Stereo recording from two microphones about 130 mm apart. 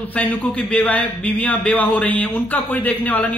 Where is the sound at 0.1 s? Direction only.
10° left (ahead or behind).